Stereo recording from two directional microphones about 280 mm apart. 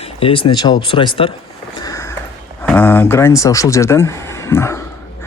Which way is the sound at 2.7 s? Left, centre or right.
Centre.